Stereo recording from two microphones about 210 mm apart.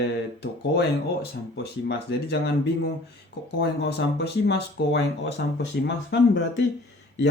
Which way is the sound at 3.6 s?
50° left (ahead or behind).